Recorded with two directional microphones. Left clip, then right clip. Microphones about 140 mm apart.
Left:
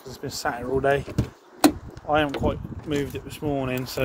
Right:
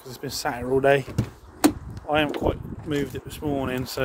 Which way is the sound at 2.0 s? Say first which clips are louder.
Left 1 dB; 45° right (ahead or behind).